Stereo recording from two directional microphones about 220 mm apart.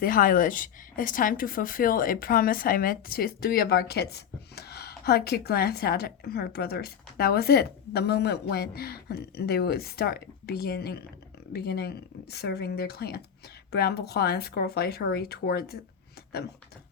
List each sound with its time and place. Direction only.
0.0 s a woman's voice: 40° left (ahead or behind)